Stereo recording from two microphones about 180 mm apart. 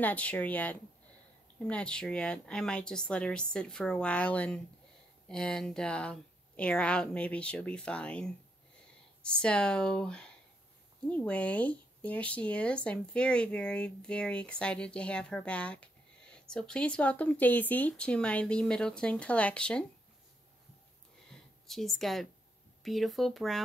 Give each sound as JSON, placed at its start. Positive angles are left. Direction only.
{"t": 0.0, "sound": "speech", "side_deg": 10}
{"t": 21.3, "sound": "a sound", "side_deg": 0}
{"t": 22.8, "sound": "speech", "side_deg": 0}